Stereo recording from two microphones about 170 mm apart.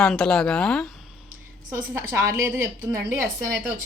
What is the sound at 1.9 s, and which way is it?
Speech, 15° right (ahead or behind).